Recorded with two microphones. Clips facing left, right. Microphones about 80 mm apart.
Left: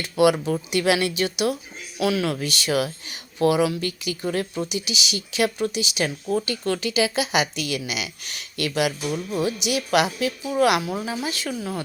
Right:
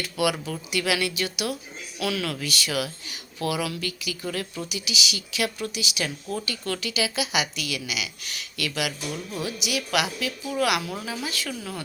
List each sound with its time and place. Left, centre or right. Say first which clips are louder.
0.0 s speech: left 7 dB; left